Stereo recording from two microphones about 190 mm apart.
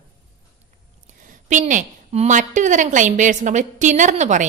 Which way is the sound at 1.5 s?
40° right (ahead or behind).